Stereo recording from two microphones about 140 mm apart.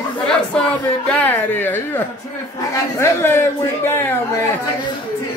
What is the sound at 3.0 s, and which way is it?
A man's voice, 15° left (ahead or behind).